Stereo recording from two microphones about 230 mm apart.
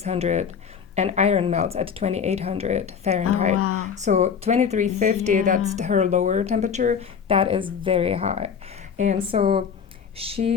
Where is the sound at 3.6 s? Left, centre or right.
Left.